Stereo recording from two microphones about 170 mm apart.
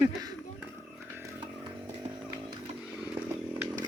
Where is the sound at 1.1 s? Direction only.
15° right (ahead or behind).